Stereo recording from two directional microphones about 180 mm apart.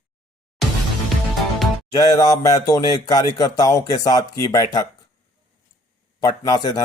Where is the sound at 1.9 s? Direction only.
20° left (ahead or behind).